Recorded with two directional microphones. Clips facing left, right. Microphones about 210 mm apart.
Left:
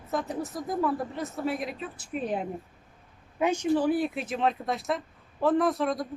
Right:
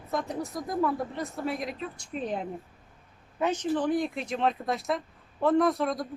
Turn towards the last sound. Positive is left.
turn(degrees=0)  # may be behind; listen again after turning